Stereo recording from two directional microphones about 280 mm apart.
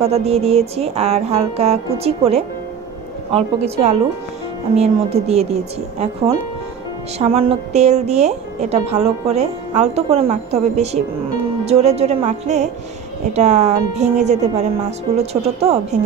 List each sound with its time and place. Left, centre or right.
0.0 s a woman's voice: right